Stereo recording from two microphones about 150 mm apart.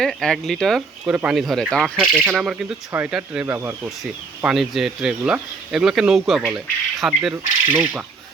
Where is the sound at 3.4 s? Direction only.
15° right (ahead or behind).